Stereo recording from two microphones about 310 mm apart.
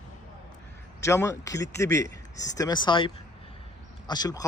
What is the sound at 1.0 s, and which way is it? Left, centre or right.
Speech, centre.